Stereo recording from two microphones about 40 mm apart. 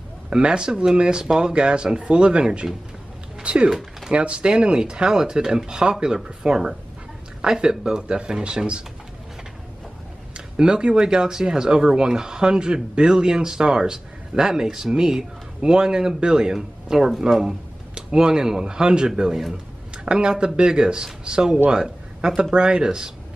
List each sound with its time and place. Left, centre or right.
0.3 s speech: right
10.3 s speech: right; by 17.6 s centre
17.9 s speech: centre
20.1 s speech: right
21.6 s a sound: centre
22.4 s speech: right